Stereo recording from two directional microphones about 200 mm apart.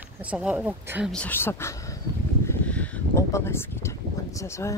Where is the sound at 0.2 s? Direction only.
5° right (ahead or behind).